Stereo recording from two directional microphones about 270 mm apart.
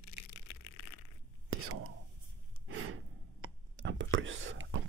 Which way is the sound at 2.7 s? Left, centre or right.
Right.